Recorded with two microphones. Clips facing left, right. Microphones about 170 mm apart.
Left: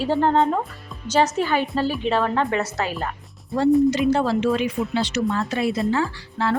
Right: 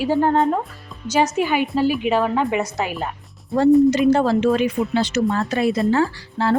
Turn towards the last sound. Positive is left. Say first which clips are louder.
# right 3 dB
turn(degrees=-40)  # may be behind; listen again after turning